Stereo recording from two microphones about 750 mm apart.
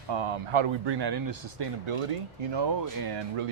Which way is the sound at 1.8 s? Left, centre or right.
Right.